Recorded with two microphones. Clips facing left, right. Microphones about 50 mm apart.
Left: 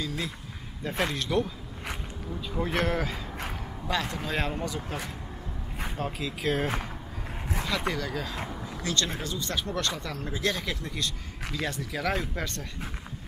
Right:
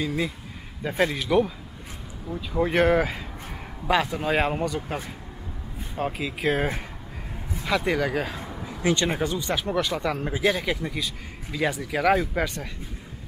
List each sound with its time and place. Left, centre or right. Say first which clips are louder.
0.0 s speech: right 6 dB; centre
9.4 s speech: right 5 dB; centre